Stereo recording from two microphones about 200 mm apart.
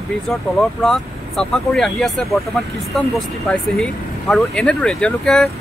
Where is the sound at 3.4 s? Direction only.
5° left (ahead or behind).